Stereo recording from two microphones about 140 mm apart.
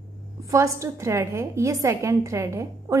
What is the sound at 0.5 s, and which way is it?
A woman's voice, 20° right (ahead or behind).